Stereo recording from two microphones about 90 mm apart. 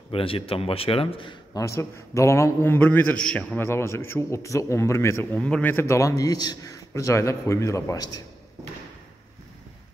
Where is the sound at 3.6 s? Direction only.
30° left (ahead or behind).